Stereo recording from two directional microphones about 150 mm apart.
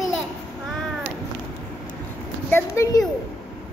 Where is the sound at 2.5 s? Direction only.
20° left (ahead or behind).